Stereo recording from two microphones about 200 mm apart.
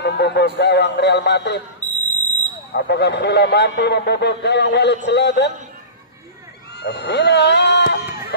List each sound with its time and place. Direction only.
0.0 s a sound: 60° left (ahead or behind)
0.6 s speech: 60° left (ahead or behind)
1.8 s smoke detector: 10° left (ahead or behind)
2.7 s speech: 55° left (ahead or behind)
6.8 s speech: 55° left (ahead or behind)